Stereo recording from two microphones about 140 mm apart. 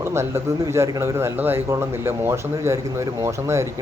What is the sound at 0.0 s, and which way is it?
Speech, 20° right (ahead or behind).